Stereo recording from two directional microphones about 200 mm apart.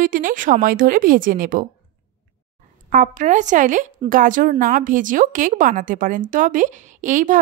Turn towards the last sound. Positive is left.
turn(degrees=-40)  # may be behind; listen again after turning